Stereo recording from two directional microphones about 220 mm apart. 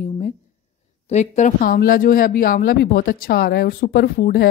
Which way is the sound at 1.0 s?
30° left (ahead or behind).